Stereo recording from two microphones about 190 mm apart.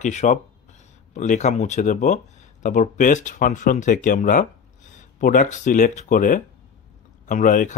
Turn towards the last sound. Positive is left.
turn(degrees=40)  # may be behind; listen again after turning